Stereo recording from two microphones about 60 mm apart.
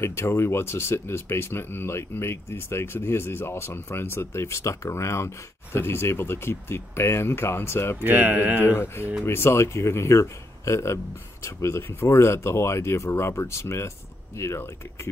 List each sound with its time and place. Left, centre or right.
0.0 s speech: left
8.0 s speech: right
8.6 s speech: left